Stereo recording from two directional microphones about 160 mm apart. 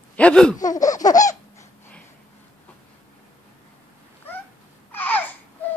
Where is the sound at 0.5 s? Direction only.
20° left (ahead or behind).